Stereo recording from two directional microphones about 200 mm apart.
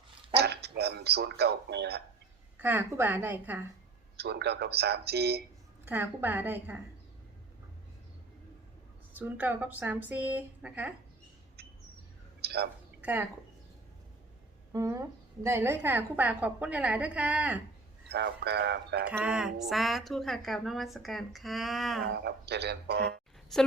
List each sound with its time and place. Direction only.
0.3 s speech: 55° right (ahead or behind)
2.6 s a woman's voice: 10° right (ahead or behind)
4.2 s speech: 55° right (ahead or behind)
5.8 s a woman's voice: 10° right (ahead or behind)
9.1 s a woman's voice: 10° right (ahead or behind)
12.4 s a sound: 55° right (ahead or behind)
13.0 s speech: 10° right (ahead or behind)
14.7 s a woman's voice: 15° right (ahead or behind)
18.1 s speech: 55° right (ahead or behind)
19.0 s a woman's voice: 5° right (ahead or behind)
22.0 s speech: 55° right (ahead or behind)
23.5 s a woman's voice: centre (ahead or behind)